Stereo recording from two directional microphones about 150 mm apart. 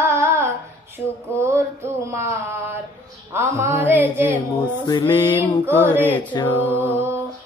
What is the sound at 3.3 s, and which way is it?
Speech, 15° right (ahead or behind).